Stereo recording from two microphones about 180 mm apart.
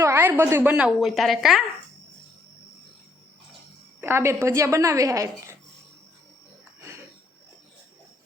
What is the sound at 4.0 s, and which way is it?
A woman's voice, 15° right (ahead or behind).